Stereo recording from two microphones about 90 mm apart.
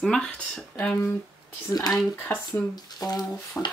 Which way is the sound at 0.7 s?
15° left (ahead or behind).